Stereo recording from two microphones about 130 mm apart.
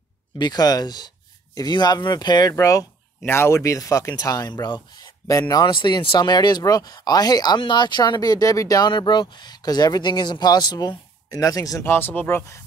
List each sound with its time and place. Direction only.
0.4 s speech: 30° left (ahead or behind)